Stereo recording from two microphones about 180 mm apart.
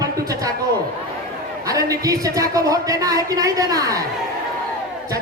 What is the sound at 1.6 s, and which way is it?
Speech, 20° right (ahead or behind).